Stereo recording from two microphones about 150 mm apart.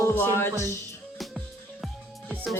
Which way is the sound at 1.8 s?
Centre (ahead or behind).